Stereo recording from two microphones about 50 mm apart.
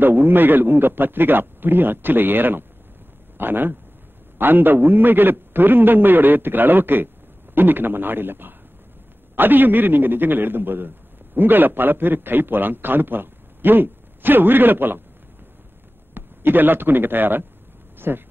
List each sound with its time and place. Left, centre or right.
0.0 s a man's voice: right
16.2 s a man's voice: right
17.9 s a sound: right